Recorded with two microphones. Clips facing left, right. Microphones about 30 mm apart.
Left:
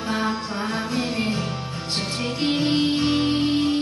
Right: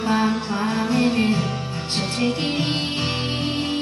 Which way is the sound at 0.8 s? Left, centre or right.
Right.